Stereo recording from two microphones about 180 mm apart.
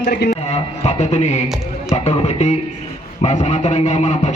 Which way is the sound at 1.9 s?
35° left (ahead or behind).